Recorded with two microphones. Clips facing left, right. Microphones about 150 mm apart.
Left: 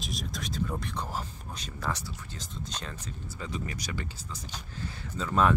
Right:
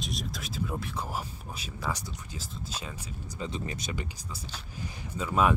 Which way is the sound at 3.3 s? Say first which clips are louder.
Right 2 dB; 25° right (ahead or behind).